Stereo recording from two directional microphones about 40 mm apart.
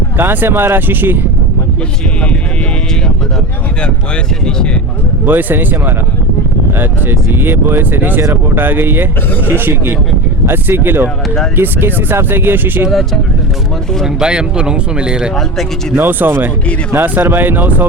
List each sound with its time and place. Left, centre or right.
0.4 s speech: right
4.4 s speech: left
5.2 s speech: right
6.7 s speech: right
14.2 s speech: right
16.0 s speech: right
16.9 s speech: right